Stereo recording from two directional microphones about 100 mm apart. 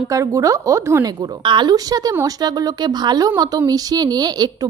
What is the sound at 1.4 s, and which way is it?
A woman's voice, 50° right (ahead or behind).